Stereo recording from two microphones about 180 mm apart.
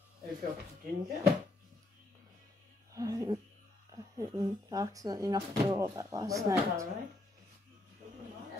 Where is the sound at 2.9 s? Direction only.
20° right (ahead or behind).